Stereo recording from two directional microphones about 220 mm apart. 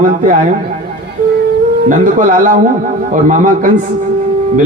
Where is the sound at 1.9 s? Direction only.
35° right (ahead or behind).